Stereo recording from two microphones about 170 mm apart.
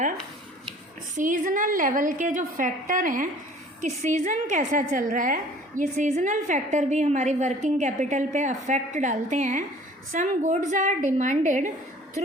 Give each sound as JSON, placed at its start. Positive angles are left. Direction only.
{"t": 1.1, "sound": "a woman's voice", "side_deg": -50}